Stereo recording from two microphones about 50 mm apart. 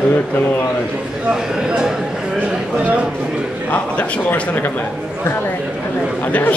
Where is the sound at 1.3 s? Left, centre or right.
Centre.